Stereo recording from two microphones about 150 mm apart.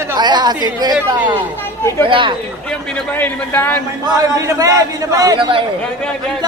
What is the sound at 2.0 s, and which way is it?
Speech, 35° right (ahead or behind).